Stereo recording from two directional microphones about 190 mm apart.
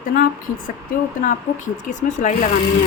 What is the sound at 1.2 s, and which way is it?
A woman's voice, 40° left (ahead or behind).